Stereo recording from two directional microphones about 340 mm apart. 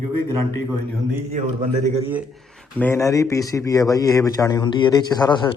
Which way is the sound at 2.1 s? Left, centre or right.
Centre.